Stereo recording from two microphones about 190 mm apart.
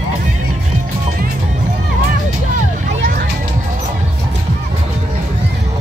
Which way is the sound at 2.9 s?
45° right (ahead or behind).